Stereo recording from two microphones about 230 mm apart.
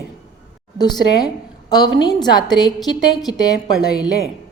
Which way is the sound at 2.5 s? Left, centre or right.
Centre.